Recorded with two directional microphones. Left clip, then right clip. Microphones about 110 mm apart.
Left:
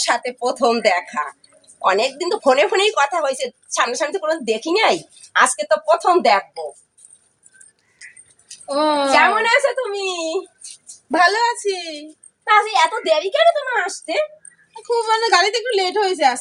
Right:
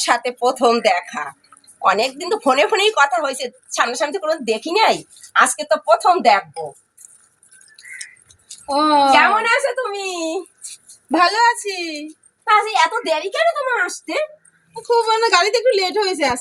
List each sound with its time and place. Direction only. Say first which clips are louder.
0.0 s speech: right 2 dB; 15° left (ahead or behind)
8.6 s a child's voice: right 4 dB; 35° left (ahead or behind); by 14.2 s 10° left (ahead or behind)
14.8 s a woman's voice: right 2 dB; 25° left (ahead or behind)